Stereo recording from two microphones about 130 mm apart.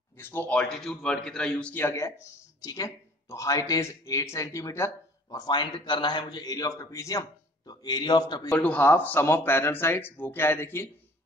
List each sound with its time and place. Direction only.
0.2 s speech: 15° left (ahead or behind)
5.4 s a man's voice: 35° left (ahead or behind)
8.5 s speech: 10° left (ahead or behind)